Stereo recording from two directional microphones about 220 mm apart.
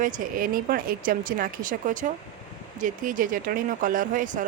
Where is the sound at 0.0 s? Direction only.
40° right (ahead or behind).